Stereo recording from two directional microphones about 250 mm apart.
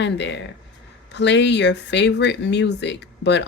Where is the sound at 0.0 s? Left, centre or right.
Left.